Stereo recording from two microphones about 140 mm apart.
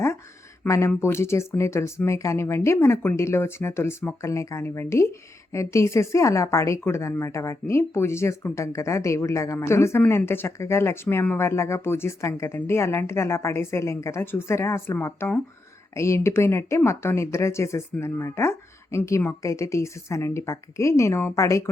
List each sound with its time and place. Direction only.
0.7 s speech: 20° left (ahead or behind)